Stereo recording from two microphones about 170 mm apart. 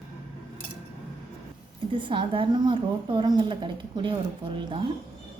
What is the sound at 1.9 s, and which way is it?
A woman's voice, 30° right (ahead or behind).